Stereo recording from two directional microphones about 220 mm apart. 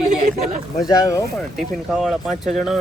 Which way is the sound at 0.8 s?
15° left (ahead or behind).